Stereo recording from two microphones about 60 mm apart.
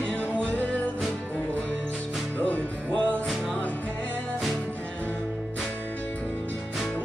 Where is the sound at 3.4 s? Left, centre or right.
Left.